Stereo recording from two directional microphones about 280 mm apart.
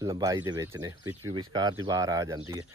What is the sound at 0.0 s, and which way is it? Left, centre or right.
Speech, centre.